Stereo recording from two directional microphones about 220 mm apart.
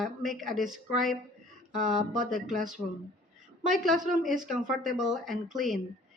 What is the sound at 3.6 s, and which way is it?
Speech, centre (ahead or behind).